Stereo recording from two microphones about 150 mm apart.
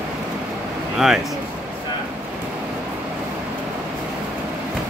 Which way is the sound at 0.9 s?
5° right (ahead or behind).